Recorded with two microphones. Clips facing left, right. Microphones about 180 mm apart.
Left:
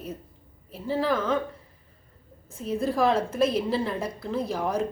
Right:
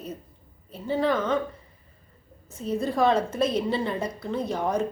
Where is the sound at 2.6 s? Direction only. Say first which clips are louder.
Even; centre (ahead or behind).